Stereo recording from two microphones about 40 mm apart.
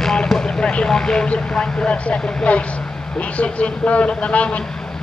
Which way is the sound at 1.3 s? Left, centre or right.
Left.